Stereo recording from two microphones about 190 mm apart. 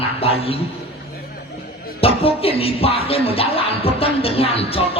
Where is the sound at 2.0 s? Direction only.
30° left (ahead or behind).